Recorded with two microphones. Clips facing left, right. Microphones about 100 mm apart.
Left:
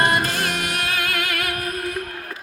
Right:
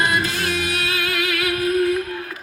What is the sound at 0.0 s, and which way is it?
Music, 55° left (ahead or behind).